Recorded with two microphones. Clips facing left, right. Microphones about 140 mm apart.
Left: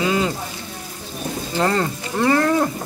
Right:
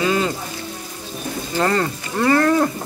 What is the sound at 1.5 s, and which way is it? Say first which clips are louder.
Speech: right 1 dB; 15° left (ahead or behind).